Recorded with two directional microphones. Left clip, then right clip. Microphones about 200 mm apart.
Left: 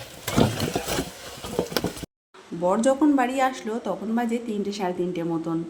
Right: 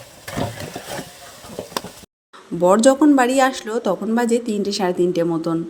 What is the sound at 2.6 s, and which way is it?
Speech, 30° right (ahead or behind).